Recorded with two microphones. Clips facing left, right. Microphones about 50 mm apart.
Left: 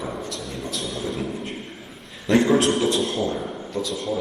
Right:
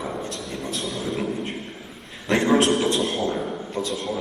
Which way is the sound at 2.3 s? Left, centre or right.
Right.